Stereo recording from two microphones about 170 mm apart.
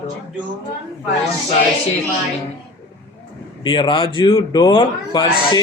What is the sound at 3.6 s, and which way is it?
Speech, 30° left (ahead or behind).